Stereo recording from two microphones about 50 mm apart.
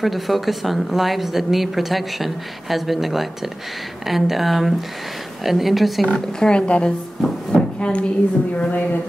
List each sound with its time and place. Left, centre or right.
0.0 s a woman's voice: centre
6.1 s a woman's voice: centre
7.5 s a sound: left
8.5 s speech: left